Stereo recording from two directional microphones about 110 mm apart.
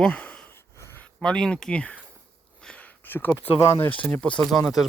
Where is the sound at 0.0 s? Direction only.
10° left (ahead or behind).